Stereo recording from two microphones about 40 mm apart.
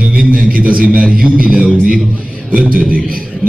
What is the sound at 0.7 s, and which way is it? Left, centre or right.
Speech, right.